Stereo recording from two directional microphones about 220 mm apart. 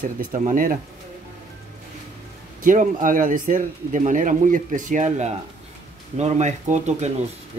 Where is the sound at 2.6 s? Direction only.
40° right (ahead or behind).